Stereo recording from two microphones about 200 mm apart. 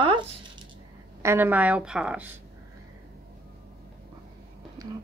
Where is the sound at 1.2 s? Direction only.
10° right (ahead or behind).